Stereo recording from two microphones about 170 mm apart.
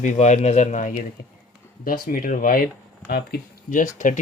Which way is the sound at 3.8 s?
50° left (ahead or behind).